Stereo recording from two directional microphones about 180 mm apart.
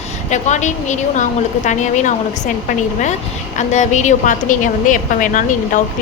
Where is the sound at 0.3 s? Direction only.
40° left (ahead or behind).